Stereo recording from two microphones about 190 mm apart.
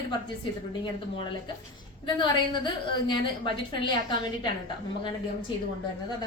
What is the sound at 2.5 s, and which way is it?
A woman's voice, 25° left (ahead or behind).